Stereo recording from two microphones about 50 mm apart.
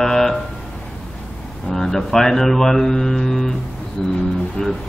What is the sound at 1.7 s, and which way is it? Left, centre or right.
A man's voice, centre.